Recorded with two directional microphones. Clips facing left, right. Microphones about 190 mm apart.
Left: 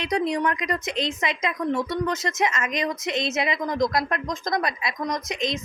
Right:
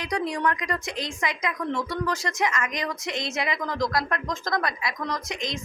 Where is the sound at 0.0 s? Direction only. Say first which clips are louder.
Left 3 dB; 20° left (ahead or behind).